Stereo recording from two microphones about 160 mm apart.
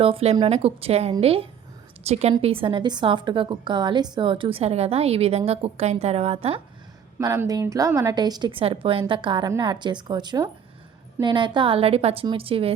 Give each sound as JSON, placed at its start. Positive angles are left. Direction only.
{"t": 0.0, "sound": "a woman's voice", "side_deg": -35}
{"t": 7.2, "sound": "a woman's voice", "side_deg": -20}